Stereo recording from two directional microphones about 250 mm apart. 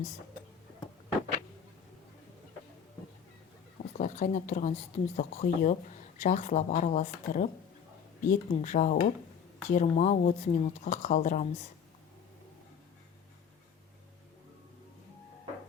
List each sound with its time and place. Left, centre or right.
3.9 s speech: left